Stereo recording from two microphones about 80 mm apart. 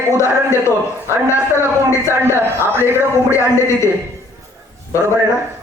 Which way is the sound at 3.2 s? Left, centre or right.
Left.